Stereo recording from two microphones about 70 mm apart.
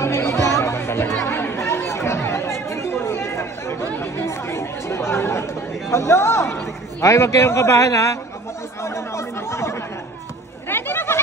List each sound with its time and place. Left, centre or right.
0.0 s music: left
1.3 s chatter: left
10.7 s a sound: left